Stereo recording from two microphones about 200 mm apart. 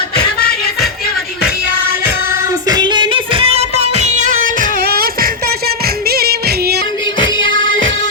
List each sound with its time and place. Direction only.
0.2 s music: 50° left (ahead or behind)
2.6 s music: 20° right (ahead or behind); by 6.8 s 50° right (ahead or behind)
7.3 s music: 75° right (ahead or behind)